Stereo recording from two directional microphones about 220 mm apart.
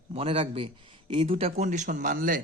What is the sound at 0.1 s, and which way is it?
A man's voice, 25° right (ahead or behind).